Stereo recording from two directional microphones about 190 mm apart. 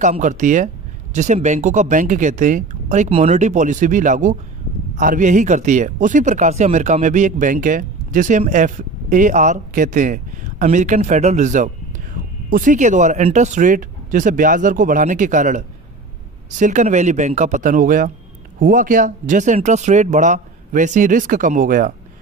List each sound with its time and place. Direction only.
0.0 s speech: 40° right (ahead or behind)